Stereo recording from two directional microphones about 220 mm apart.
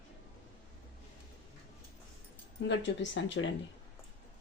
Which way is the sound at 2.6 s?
55° left (ahead or behind).